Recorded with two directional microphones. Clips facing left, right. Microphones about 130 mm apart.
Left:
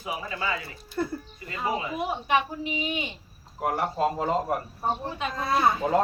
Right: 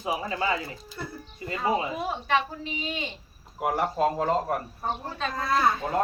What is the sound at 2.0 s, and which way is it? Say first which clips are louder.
A woman's voice: left 1 dB; 15° left (ahead or behind).